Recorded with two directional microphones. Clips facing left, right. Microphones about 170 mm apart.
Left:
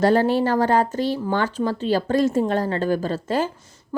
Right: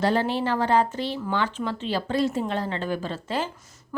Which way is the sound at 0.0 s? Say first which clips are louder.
Left 6 dB; 45° left (ahead or behind).